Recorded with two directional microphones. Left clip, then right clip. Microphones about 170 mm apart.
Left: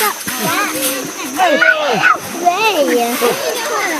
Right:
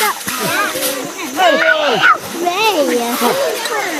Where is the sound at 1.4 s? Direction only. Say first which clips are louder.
Even; 20° right (ahead or behind).